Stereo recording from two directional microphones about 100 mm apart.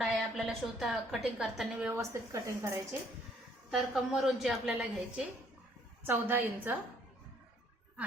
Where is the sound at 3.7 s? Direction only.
5° right (ahead or behind).